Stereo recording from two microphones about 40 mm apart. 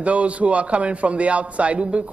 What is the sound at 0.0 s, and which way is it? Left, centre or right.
A man's voice, right.